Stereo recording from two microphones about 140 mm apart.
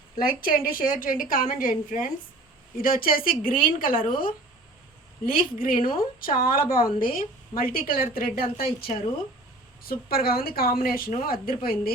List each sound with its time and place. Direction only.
0.2 s a woman's voice: 90° left
9.9 s a woman's voice: 90° left